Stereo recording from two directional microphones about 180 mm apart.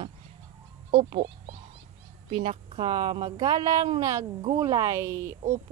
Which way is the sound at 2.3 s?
35° right (ahead or behind).